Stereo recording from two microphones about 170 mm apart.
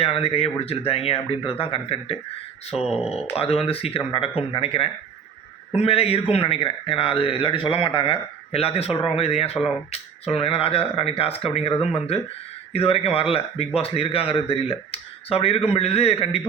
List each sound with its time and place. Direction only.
0.0 s speech: 35° left (ahead or behind)
2.7 s speech: 5° right (ahead or behind)
3.1 s speech: 35° left (ahead or behind)